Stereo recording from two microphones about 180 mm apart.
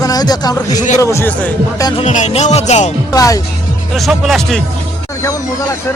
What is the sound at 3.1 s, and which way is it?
Speech, 20° left (ahead or behind).